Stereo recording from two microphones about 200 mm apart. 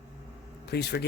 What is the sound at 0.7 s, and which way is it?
Speech, 55° left (ahead or behind).